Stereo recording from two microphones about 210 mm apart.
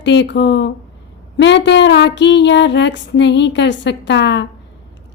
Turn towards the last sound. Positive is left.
turn(degrees=55)  # may be behind; listen again after turning